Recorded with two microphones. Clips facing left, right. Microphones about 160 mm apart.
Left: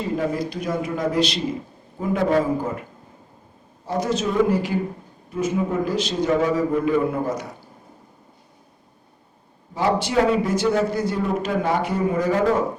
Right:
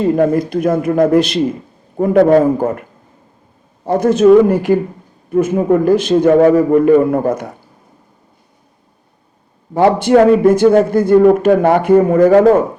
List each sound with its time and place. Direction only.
0.0 s a man's voice: 55° right (ahead or behind)
3.8 s a man's voice: 55° right (ahead or behind)
9.7 s a man's voice: 55° right (ahead or behind)